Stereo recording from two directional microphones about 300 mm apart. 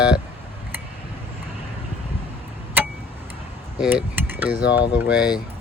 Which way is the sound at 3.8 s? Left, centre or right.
Centre.